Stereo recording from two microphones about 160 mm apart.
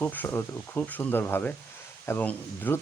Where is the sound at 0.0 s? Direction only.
10° left (ahead or behind).